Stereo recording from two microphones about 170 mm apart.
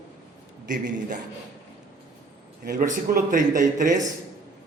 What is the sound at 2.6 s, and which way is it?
A man's voice, 50° right (ahead or behind).